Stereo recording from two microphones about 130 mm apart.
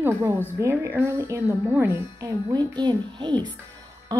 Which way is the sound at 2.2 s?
30° right (ahead or behind).